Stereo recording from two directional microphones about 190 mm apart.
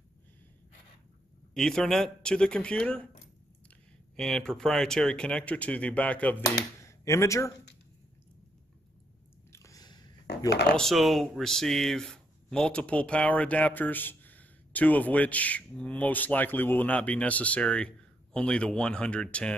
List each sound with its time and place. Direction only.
1.5 s speech: 5° left (ahead or behind)
4.2 s speech: 5° left (ahead or behind)
9.5 s biting: 15° left (ahead or behind)
10.5 s speech: 55° left (ahead or behind)
10.8 s speech: centre (ahead or behind)